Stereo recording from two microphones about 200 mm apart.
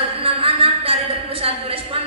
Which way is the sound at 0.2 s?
25° right (ahead or behind).